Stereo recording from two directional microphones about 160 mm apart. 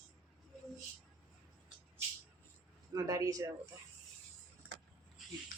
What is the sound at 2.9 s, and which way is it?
Speech, 20° right (ahead or behind).